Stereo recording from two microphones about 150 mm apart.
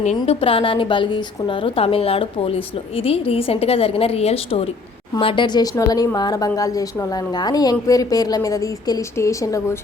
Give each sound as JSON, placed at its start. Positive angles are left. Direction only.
{"t": 0.0, "sound": "a woman's voice", "side_deg": 45}